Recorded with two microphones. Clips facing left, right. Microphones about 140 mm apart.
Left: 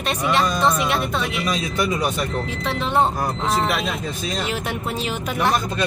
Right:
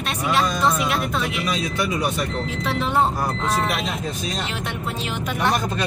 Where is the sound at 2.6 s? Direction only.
5° right (ahead or behind).